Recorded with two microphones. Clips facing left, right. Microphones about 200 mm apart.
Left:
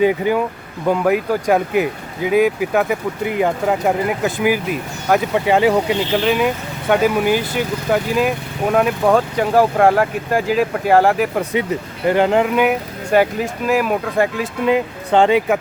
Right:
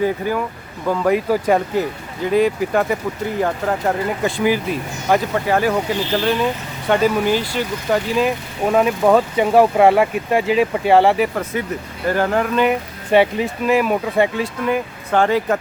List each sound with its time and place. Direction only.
0.0 s speech: 20° left (ahead or behind)
1.3 s speech: centre (ahead or behind)
1.7 s speech: 10° left (ahead or behind)
5.5 s speech: 20° left (ahead or behind)
6.1 s speech: 10° left (ahead or behind)
11.5 s speech: 20° left (ahead or behind)
12.6 s speech: centre (ahead or behind)
14.4 s speech: 20° left (ahead or behind)